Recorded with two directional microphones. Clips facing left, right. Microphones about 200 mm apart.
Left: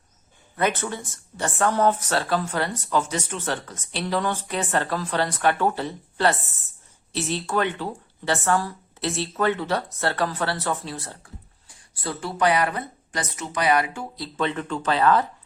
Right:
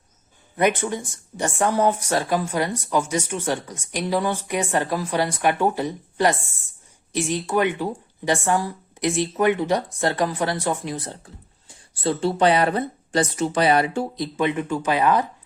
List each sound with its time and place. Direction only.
0.5 s speech: 15° right (ahead or behind)
14.3 s speech: 15° right (ahead or behind)